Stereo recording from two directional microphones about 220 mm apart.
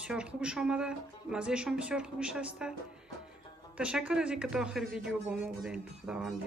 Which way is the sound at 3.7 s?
5° right (ahead or behind).